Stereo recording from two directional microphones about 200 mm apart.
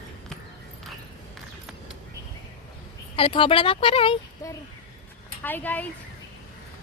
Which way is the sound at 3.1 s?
25° left (ahead or behind).